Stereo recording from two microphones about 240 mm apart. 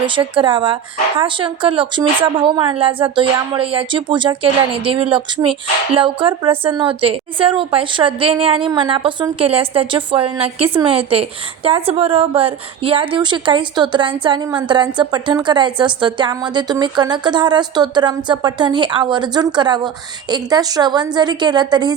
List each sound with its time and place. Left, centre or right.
0.0 s a woman's voice: right